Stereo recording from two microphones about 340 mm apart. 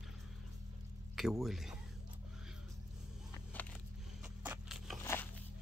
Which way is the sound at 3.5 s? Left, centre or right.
Centre.